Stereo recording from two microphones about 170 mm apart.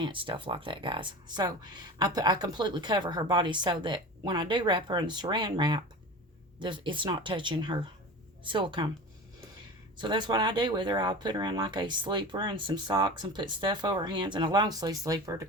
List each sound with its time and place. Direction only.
0.0 s speech: 30° right (ahead or behind)
10.0 s speech: 25° right (ahead or behind)